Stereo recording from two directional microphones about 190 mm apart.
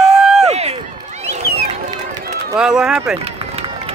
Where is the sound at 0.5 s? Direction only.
35° right (ahead or behind).